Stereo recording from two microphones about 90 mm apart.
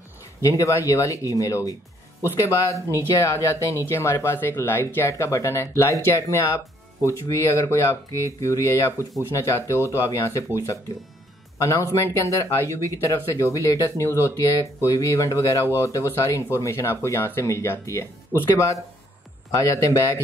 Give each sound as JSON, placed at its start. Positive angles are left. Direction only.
{"t": 0.4, "sound": "speech", "side_deg": 35}